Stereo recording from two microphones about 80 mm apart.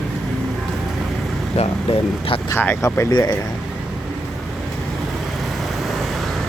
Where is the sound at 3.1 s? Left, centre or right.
Left.